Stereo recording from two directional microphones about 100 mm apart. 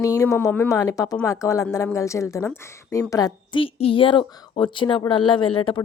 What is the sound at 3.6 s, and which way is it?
Speech, 70° left (ahead or behind).